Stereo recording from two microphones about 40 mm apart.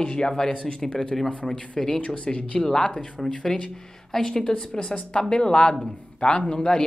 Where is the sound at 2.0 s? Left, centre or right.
Left.